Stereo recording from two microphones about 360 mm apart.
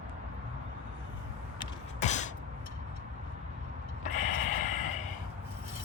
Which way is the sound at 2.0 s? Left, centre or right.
Centre.